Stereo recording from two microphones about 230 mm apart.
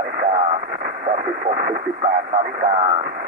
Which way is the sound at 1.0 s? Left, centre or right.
Right.